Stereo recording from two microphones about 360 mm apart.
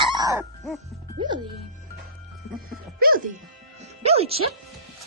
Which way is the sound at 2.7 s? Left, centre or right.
Right.